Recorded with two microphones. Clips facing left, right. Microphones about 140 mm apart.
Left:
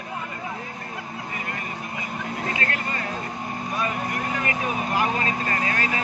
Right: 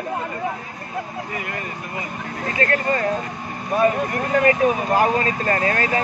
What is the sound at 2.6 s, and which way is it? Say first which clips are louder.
Speech: right 8 dB; 40° right (ahead or behind).